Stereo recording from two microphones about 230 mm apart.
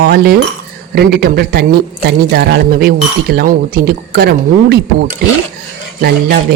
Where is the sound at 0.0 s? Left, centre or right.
Right.